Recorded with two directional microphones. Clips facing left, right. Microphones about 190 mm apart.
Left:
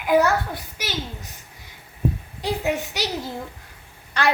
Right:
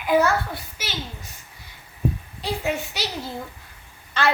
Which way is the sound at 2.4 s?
15° left (ahead or behind).